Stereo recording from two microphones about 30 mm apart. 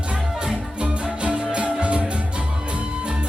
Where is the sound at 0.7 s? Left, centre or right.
Right.